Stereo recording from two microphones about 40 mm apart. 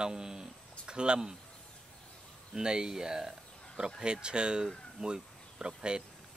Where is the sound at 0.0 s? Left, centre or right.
Centre.